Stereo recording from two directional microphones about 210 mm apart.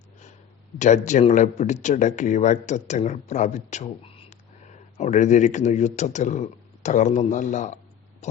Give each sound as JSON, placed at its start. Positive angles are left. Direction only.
{"t": 0.8, "sound": "speech", "side_deg": 35}